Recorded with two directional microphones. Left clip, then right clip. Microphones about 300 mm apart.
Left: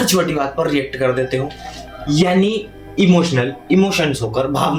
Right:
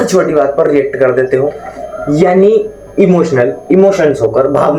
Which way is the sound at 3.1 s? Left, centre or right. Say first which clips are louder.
Right 7 dB; left.